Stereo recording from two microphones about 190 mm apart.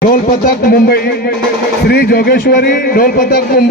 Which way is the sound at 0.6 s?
55° left (ahead or behind).